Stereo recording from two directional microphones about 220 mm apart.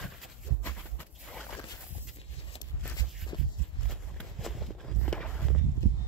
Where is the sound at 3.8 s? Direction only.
Centre (ahead or behind).